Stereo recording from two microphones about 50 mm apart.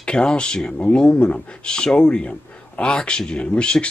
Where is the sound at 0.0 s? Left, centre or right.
Centre.